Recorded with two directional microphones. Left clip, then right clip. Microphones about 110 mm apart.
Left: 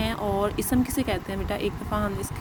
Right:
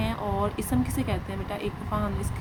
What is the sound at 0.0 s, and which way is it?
Speech, 35° left (ahead or behind).